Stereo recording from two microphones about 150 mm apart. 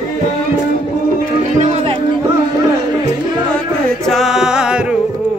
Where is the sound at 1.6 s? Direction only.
45° right (ahead or behind).